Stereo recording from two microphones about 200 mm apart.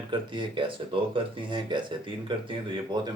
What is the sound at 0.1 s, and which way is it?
Speech, 25° right (ahead or behind).